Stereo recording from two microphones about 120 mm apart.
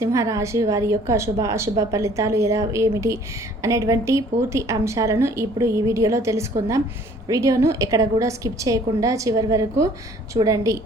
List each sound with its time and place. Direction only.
0.0 s a woman's voice: 25° right (ahead or behind)